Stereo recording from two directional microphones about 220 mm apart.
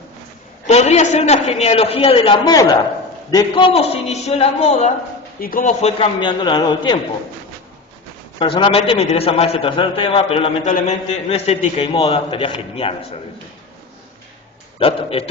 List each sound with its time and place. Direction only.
0.7 s a man's voice: 30° left (ahead or behind)
8.4 s a man's voice: 20° left (ahead or behind)
14.8 s a man's voice: 25° left (ahead or behind)